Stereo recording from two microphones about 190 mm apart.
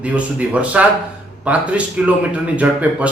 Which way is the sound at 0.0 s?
5° right (ahead or behind).